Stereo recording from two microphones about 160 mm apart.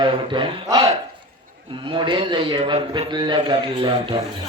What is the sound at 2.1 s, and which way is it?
Speech, 30° right (ahead or behind).